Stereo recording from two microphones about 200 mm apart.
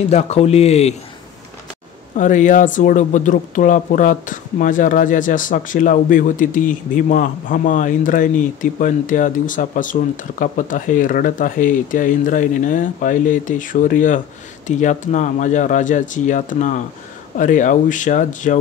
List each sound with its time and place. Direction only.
0.1 s speech: 30° left (ahead or behind)
2.1 s speech: 40° left (ahead or behind)